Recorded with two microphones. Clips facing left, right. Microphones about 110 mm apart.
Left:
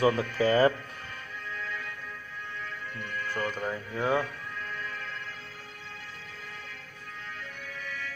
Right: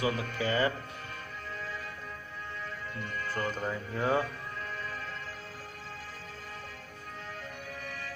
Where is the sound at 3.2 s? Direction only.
35° right (ahead or behind).